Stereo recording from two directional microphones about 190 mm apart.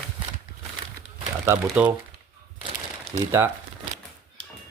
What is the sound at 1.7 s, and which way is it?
Speech, 5° right (ahead or behind).